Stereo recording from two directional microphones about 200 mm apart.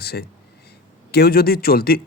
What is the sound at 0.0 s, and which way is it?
A man's voice, 50° left (ahead or behind).